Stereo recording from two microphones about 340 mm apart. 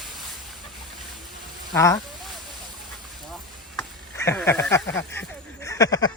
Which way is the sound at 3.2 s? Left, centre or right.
Centre.